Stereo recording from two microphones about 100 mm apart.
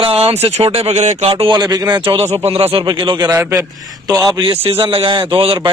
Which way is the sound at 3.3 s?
30° right (ahead or behind).